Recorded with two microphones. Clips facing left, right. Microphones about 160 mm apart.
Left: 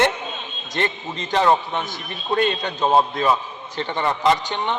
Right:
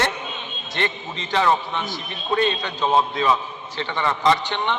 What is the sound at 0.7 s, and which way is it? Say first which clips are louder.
Speech: left 2 dB; 45° left (ahead or behind).